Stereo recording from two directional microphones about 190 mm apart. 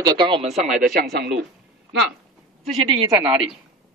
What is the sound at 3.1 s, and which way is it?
Speech, 5° right (ahead or behind).